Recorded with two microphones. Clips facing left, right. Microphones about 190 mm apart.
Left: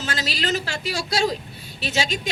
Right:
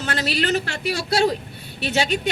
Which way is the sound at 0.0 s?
60° right (ahead or behind).